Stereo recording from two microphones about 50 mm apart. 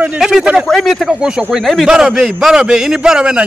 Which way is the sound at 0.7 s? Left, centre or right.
Centre.